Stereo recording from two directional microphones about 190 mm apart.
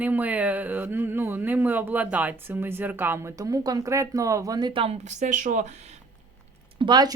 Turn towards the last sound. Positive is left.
turn(degrees=-20)  # may be behind; listen again after turning